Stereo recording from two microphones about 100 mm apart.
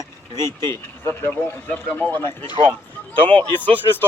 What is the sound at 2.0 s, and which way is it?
Speech, 15° left (ahead or behind).